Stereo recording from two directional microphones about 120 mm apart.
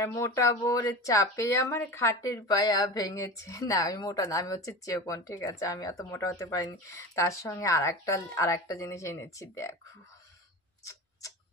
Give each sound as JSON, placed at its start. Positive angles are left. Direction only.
{"t": 0.0, "sound": "speech", "side_deg": 25}
{"t": 10.8, "sound": "tick-tock", "side_deg": 25}